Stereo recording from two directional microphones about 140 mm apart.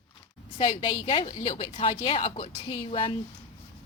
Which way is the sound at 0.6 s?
45° left (ahead or behind).